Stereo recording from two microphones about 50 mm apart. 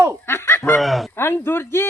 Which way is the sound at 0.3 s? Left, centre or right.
Left.